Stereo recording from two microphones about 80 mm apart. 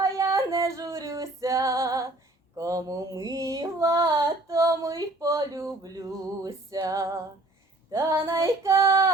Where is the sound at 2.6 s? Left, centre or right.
Right.